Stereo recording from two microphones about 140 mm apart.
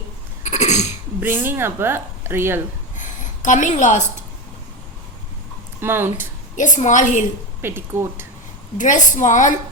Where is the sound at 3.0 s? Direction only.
65° left (ahead or behind).